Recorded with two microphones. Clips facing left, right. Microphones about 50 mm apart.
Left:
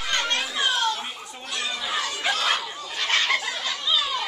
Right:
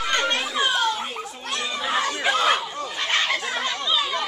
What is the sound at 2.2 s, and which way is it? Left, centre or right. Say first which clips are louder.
Chatter: right 3 dB; centre.